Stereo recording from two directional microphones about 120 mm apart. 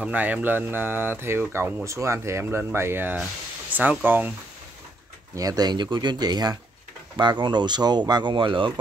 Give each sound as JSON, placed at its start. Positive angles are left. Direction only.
{"t": 0.0, "sound": "speech", "side_deg": -15}
{"t": 5.3, "sound": "speech", "side_deg": -30}